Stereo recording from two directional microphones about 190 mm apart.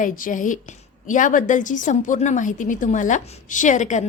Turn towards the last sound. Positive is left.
turn(degrees=40)  # may be behind; listen again after turning